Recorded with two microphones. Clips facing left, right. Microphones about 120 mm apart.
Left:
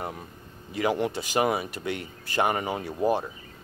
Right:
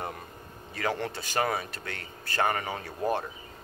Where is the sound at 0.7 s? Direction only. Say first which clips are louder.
Left 5 dB; 15° left (ahead or behind).